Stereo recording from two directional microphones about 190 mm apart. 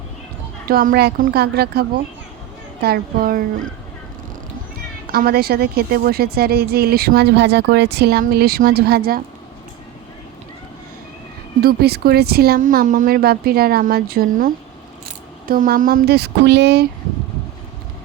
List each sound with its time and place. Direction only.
0.7 s speech: 50° right (ahead or behind)
2.8 s speech: 50° right (ahead or behind)
5.1 s speech: 55° right (ahead or behind)
11.6 s speech: 55° right (ahead or behind)